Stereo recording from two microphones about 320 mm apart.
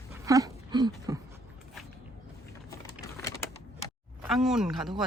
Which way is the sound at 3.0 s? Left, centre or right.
Centre.